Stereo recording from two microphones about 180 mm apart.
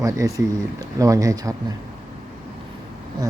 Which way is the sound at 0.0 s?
20° right (ahead or behind).